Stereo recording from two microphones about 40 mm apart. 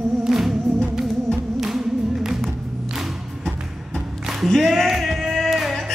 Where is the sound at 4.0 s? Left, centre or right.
Centre.